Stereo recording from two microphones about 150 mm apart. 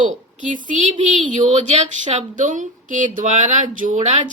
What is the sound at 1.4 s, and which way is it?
Speech, 50° right (ahead or behind).